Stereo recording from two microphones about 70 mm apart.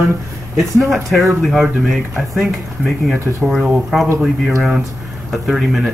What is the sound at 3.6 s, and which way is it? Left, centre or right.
Speech, centre.